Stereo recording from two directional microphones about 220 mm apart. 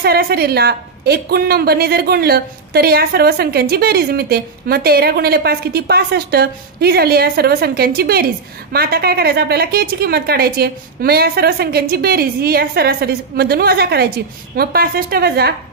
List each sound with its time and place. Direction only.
0.0 s a woman's voice: 45° right (ahead or behind)